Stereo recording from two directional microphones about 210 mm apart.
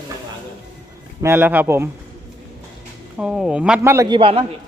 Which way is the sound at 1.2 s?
10° right (ahead or behind).